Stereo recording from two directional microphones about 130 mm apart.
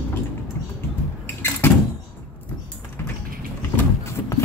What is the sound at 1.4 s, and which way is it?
Door, 15° left (ahead or behind).